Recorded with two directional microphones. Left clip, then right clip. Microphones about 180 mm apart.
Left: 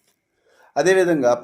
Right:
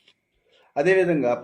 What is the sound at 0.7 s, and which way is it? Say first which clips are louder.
Speech: left 3 dB; 25° left (ahead or behind).